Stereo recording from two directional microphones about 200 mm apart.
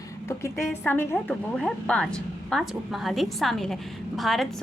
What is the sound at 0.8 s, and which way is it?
A woman's voice, 10° left (ahead or behind).